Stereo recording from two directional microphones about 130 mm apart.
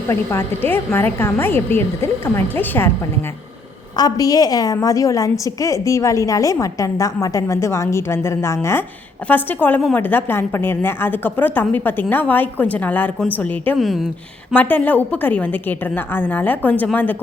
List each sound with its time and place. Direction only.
0.1 s a woman's voice: 20° left (ahead or behind)
3.9 s a woman's voice: 30° left (ahead or behind); by 13.7 s 15° left (ahead or behind)
13.7 s speech: centre (ahead or behind)
14.5 s a woman's voice: 10° left (ahead or behind)